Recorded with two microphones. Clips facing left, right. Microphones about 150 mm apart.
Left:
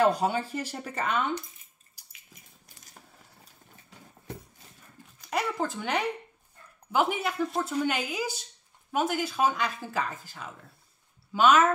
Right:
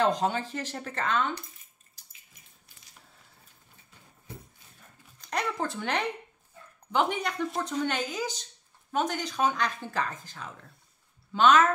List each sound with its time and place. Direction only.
0.0 s speech: 10° left (ahead or behind)
2.0 s bathtub: 10° left (ahead or behind)
5.2 s speech: 5° left (ahead or behind)